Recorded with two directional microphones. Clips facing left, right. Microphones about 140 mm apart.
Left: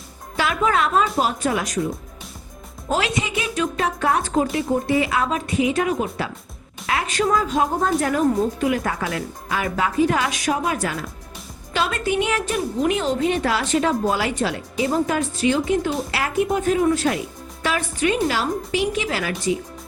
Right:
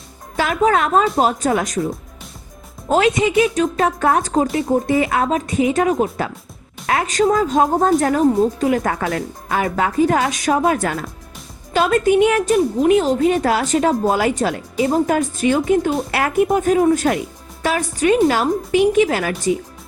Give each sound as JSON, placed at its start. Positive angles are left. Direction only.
{"t": 0.3, "sound": "a woman's voice", "side_deg": -45}
{"t": 2.9, "sound": "a woman's voice", "side_deg": -45}